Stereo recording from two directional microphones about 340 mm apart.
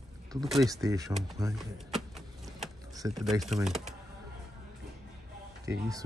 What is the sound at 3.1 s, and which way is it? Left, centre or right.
Speech, centre.